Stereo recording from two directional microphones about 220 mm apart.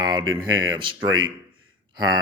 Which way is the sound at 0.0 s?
20° right (ahead or behind).